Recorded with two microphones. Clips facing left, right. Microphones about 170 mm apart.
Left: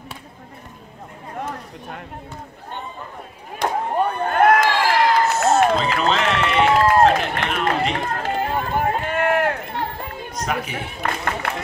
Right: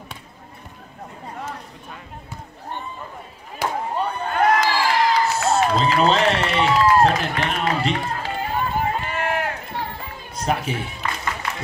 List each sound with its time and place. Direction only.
3.6 s a sound: 50° left (ahead or behind)
5.9 s speech: 35° right (ahead or behind)
6.5 s a sound: 50° left (ahead or behind)
7.9 s run: 50° left (ahead or behind)
10.4 s speech: 30° right (ahead or behind)
11.0 s music: 55° left (ahead or behind)